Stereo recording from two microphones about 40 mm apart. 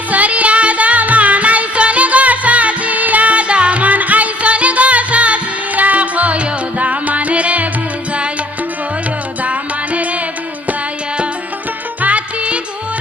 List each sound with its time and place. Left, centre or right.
0.1 s music: right
9.4 s music: right
12.0 s music: right